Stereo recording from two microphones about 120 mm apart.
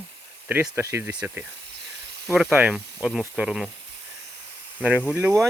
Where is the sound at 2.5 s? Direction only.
15° right (ahead or behind).